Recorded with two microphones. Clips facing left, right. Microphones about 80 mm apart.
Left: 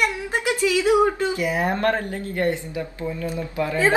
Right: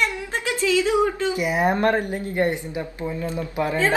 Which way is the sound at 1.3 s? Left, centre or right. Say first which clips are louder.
Right 2 dB; right.